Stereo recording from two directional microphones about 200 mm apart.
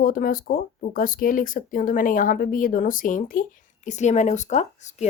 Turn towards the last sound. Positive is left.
turn(degrees=35)  # may be behind; listen again after turning